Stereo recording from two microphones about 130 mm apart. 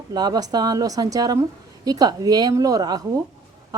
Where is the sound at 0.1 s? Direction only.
30° right (ahead or behind).